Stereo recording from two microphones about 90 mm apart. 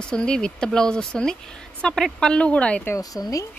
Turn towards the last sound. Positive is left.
turn(degrees=40)  # may be behind; listen again after turning